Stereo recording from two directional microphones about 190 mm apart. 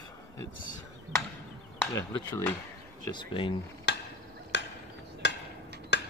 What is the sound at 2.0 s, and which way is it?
Speech, 15° left (ahead or behind).